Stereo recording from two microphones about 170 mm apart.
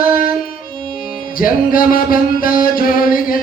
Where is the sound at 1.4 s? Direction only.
55° left (ahead or behind).